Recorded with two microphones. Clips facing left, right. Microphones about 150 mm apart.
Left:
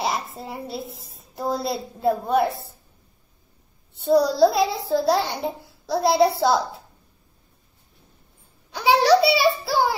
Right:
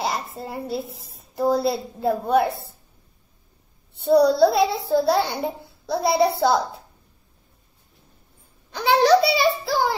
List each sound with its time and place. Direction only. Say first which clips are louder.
0.0 s a woman's voice: even; centre (ahead or behind)
4.0 s a woman's voice: right 1 dB; centre (ahead or behind)
8.7 s a woman's voice: even; 5° left (ahead or behind)